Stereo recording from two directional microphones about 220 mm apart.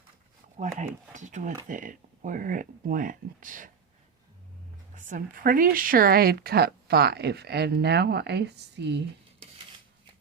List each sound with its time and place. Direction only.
0.6 s speech: 35° right (ahead or behind)
4.9 s speech: 35° right (ahead or behind)